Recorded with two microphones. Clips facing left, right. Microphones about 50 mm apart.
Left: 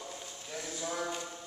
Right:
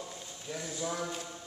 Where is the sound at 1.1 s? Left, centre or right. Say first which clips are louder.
Left 1 dB; centre.